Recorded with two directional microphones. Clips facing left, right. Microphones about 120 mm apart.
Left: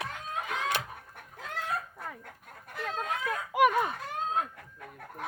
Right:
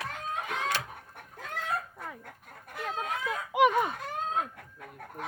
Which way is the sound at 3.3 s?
20° right (ahead or behind).